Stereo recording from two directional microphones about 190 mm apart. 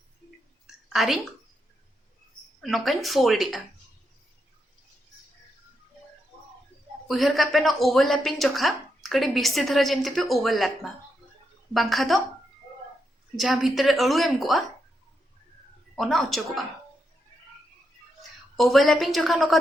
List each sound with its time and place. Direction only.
0.9 s speech: centre (ahead or behind)
2.6 s speech: centre (ahead or behind)
7.1 s speech: centre (ahead or behind)
11.7 s speech: centre (ahead or behind)
13.3 s speech: centre (ahead or behind)
16.0 s speech: centre (ahead or behind)
18.2 s a woman's voice: centre (ahead or behind)